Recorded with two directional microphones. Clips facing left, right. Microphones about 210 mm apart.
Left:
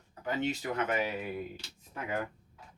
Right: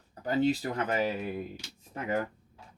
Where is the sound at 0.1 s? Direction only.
35° right (ahead or behind).